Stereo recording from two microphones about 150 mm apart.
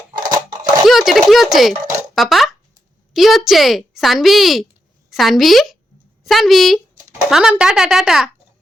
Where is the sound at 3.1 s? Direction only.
Centre (ahead or behind).